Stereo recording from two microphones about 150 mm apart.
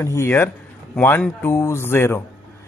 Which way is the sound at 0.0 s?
20° left (ahead or behind).